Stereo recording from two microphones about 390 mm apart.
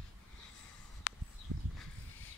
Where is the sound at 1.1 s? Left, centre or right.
Left.